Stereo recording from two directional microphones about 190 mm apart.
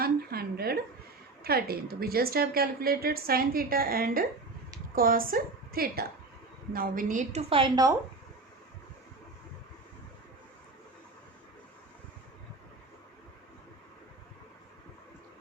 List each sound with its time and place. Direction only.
0.0 s a sound: 55° right (ahead or behind)
1.5 s a woman's voice: 55° right (ahead or behind)
7.5 s a woman's voice: 20° right (ahead or behind)